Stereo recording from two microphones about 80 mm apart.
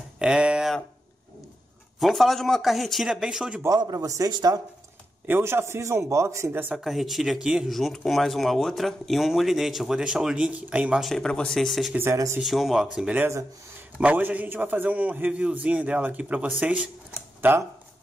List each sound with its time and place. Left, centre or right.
0.2 s a sound: centre
2.0 s speech: centre
3.6 s speech: right
5.2 s a man's voice: right
6.7 s speech: centre
7.7 s speech: centre
11.0 s speech: centre
12.8 s a man's voice: centre